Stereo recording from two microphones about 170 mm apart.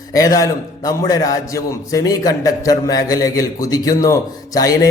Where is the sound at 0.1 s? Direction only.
20° left (ahead or behind).